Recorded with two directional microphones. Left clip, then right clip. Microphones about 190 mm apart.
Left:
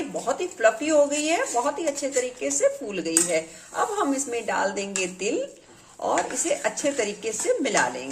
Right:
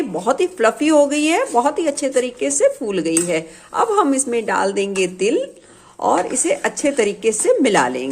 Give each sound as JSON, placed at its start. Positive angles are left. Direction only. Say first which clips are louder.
{"t": 0.3, "sound": "speech", "louder": "right 5 dB", "side_deg": -45}